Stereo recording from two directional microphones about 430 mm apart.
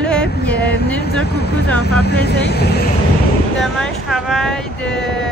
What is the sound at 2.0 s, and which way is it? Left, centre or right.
Speech, left.